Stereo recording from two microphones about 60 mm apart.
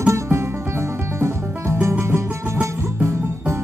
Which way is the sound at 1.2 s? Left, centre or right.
Right.